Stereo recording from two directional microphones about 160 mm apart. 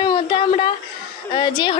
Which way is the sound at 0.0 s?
30° left (ahead or behind).